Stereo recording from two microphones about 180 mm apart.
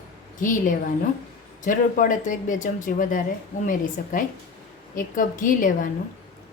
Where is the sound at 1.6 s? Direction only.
45° left (ahead or behind).